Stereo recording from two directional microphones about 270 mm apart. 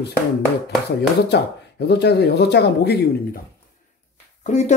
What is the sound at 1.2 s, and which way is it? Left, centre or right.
Speech, left.